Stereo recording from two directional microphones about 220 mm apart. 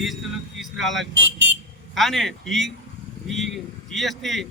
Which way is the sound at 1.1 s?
55° right (ahead or behind).